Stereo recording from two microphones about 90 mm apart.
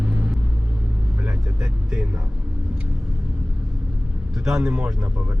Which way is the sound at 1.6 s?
5° right (ahead or behind).